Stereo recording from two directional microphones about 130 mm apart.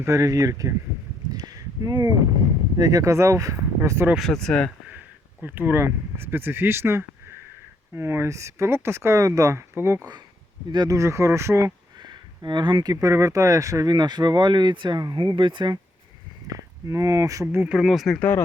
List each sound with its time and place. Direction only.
0.0 s speech: 25° right (ahead or behind)
1.3 s a sound: 30° right (ahead or behind)
2.7 s speech: 25° right (ahead or behind)
4.1 s speech: centre (ahead or behind)
5.4 s speech: 15° right (ahead or behind)
10.7 s speech: 30° right (ahead or behind)
12.0 s speech: 35° right (ahead or behind)
17.4 s speech: 15° right (ahead or behind); by 18.3 s centre (ahead or behind)